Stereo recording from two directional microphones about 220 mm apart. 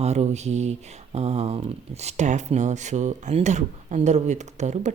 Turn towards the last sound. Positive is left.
turn(degrees=-30)  # may be behind; listen again after turning